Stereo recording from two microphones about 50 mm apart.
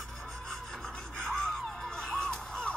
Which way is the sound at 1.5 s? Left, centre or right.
Centre.